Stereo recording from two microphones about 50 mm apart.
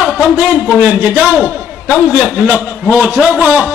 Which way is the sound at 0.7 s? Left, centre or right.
Right.